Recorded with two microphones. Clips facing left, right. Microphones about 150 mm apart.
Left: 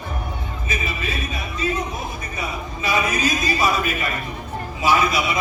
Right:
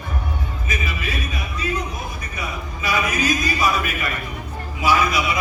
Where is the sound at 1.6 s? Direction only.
30° left (ahead or behind).